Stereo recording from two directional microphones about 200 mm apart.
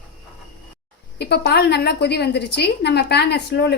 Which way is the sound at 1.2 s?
55° left (ahead or behind).